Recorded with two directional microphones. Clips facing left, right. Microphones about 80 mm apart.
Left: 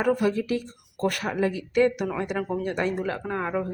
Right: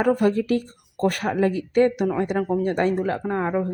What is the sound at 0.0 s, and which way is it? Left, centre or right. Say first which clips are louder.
Speech: right 3 dB; right.